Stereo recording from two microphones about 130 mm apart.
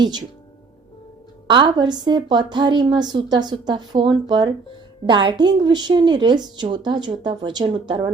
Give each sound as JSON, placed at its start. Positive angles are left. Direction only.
{"t": 1.5, "sound": "a woman's voice", "side_deg": -35}